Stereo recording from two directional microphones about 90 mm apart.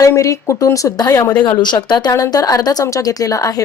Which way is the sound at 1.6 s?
55° left (ahead or behind).